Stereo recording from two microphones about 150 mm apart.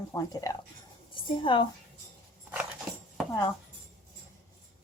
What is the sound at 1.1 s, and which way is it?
Speech, 35° left (ahead or behind).